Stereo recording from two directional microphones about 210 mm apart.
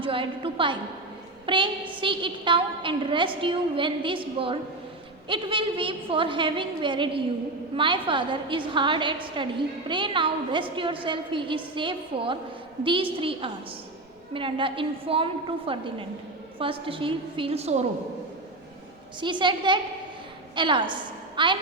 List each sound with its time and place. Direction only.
0.0 s a sound: 25° right (ahead or behind)
1.5 s a woman's voice: 25° right (ahead or behind)
19.2 s a woman's voice: 20° right (ahead or behind)